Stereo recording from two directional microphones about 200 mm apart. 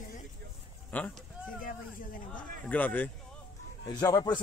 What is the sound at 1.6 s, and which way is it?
Hubbub, 45° left (ahead or behind).